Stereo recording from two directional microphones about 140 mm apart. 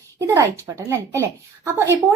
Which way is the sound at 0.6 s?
25° right (ahead or behind).